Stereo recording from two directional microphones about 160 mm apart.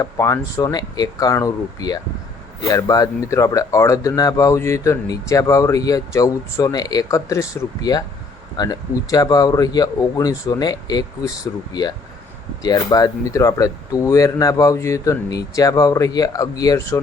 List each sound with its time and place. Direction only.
0.0 s speech: 20° left (ahead or behind)